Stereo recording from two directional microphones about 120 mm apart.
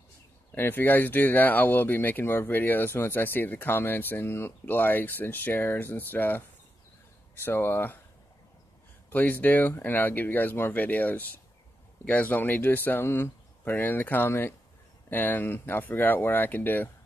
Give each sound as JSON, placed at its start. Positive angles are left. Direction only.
{"t": 0.6, "sound": "speech", "side_deg": 15}
{"t": 7.4, "sound": "speech", "side_deg": 20}
{"t": 9.1, "sound": "speech", "side_deg": 15}